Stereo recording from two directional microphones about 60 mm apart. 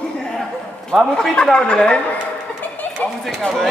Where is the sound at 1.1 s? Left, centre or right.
Centre.